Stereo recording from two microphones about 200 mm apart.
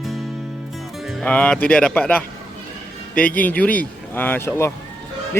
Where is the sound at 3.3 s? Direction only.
10° left (ahead or behind).